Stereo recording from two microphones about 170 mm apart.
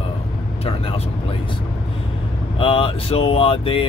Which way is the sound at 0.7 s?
35° left (ahead or behind).